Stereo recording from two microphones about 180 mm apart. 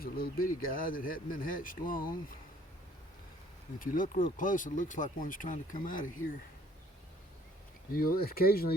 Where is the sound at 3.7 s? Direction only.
50° left (ahead or behind).